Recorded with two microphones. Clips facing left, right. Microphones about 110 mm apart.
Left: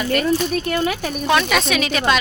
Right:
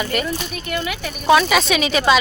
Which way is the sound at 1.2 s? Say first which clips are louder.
Right 4 dB; 5° right (ahead or behind).